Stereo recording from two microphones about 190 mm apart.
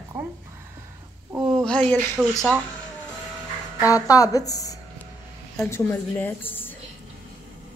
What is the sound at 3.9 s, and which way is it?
A woman's voice, 20° left (ahead or behind).